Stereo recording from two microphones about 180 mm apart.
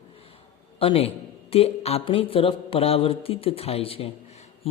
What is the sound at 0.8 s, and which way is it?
A man's voice, 35° left (ahead or behind).